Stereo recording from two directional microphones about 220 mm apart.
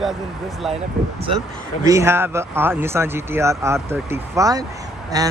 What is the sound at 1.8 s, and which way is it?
Speech, 15° right (ahead or behind).